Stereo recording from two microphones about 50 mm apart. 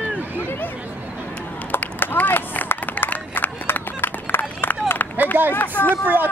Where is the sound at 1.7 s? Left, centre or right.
Left.